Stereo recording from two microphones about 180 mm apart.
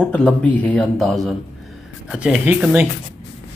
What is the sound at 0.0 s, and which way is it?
Speech, 5° left (ahead or behind).